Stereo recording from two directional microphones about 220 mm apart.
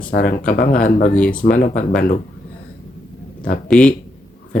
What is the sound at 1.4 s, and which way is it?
Speech, 40° left (ahead or behind).